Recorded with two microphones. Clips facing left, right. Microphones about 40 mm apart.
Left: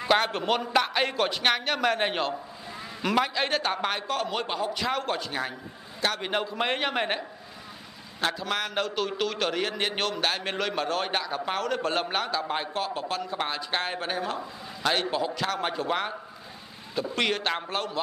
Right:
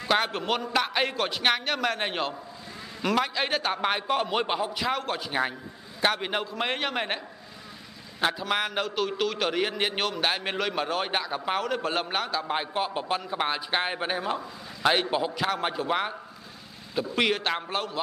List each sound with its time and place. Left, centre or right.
0.1 s a man's voice: centre
3.9 s a man's voice: centre
4.7 s a man's voice: centre
5.9 s a man's voice: centre
6.2 s a man's voice: centre
8.2 s a man's voice: centre